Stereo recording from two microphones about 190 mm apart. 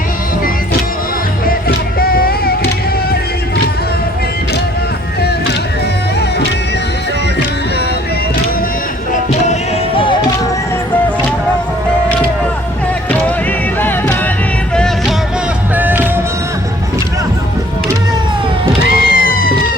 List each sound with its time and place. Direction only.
1.5 s music: 50° left (ahead or behind)
9.5 s music: 30° left (ahead or behind)
13.7 s music: 10° left (ahead or behind)
15.7 s music: 10° right (ahead or behind)
18.9 s music: 50° left (ahead or behind)